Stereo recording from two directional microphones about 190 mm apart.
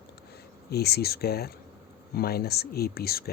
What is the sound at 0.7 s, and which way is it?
Speech, 60° left (ahead or behind).